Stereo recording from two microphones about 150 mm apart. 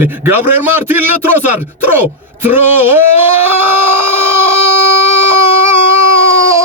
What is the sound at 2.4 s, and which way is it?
Speech, 15° right (ahead or behind).